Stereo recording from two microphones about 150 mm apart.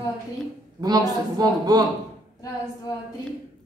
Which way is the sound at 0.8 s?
25° right (ahead or behind).